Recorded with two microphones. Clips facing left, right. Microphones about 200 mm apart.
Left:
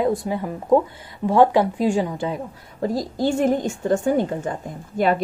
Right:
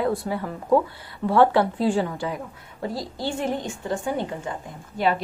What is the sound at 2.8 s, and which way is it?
A woman's voice, 45° left (ahead or behind).